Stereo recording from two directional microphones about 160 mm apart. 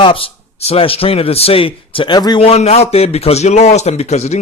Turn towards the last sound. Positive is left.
turn(degrees=45)  # may be behind; listen again after turning